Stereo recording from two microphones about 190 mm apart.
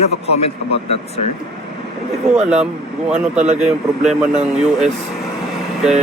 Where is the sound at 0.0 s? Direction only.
35° left (ahead or behind).